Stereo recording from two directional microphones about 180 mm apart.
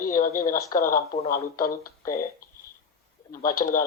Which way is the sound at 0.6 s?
15° left (ahead or behind).